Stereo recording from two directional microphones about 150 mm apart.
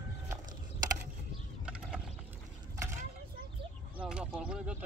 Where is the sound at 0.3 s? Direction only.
25° right (ahead or behind).